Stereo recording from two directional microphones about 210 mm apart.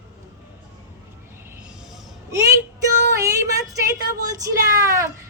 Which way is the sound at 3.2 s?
15° right (ahead or behind).